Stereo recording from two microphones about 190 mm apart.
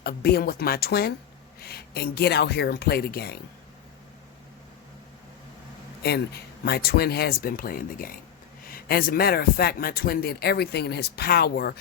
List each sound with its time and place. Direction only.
0.0 s speech: 55° left (ahead or behind)
6.0 s speech: 60° left (ahead or behind)